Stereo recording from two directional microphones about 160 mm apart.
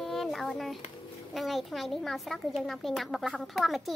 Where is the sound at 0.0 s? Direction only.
Centre (ahead or behind).